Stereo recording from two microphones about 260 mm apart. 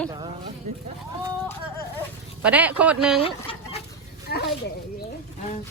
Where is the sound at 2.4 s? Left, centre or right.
Centre.